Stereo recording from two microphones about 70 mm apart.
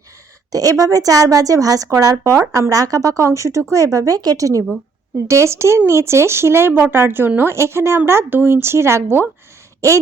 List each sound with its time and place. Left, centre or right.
0.5 s a woman's voice: right
5.1 s speech: right
7.5 s speech: right
9.8 s speech: right